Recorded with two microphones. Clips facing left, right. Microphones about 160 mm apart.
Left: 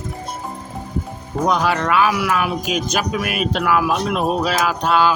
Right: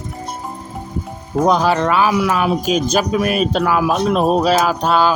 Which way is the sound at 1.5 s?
30° right (ahead or behind).